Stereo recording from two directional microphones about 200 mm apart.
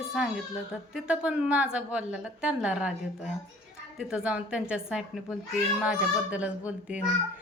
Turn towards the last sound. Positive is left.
turn(degrees=-5)  # may be behind; listen again after turning